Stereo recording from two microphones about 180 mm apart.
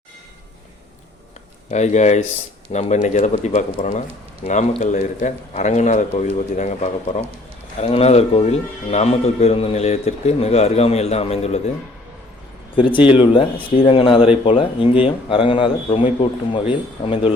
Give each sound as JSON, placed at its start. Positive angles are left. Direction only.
{"t": 1.7, "sound": "speech", "side_deg": 40}
{"t": 12.7, "sound": "a man's voice", "side_deg": 30}